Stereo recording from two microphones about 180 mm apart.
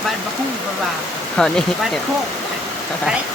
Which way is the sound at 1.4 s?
5° left (ahead or behind).